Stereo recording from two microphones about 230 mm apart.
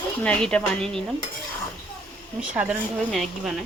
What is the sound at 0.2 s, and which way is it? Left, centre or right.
Speech, centre.